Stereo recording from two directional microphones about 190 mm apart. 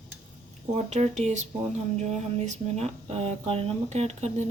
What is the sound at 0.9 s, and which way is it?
Speech, 35° right (ahead or behind).